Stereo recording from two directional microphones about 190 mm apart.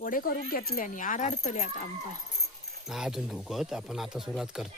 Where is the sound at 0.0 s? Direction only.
50° left (ahead or behind).